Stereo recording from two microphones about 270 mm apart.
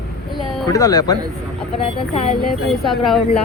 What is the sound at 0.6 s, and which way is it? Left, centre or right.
Speech, centre.